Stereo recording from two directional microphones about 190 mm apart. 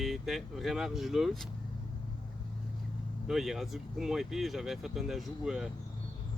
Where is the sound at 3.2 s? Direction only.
Centre (ahead or behind).